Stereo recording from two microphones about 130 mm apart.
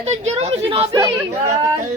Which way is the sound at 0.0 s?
55° right (ahead or behind).